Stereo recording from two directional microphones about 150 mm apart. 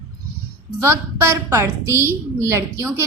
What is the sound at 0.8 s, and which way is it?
A woman's voice, 15° right (ahead or behind).